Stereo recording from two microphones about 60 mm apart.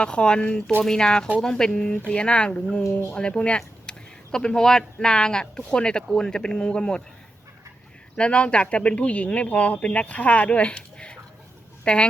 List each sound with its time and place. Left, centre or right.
0.0 s speech: centre
8.1 s speech: centre